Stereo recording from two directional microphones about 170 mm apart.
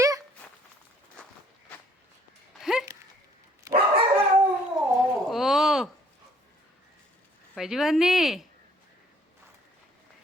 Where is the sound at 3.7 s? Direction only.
20° right (ahead or behind).